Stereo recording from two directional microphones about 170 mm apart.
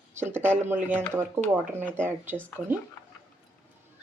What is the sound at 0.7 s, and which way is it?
Speech, 15° right (ahead or behind).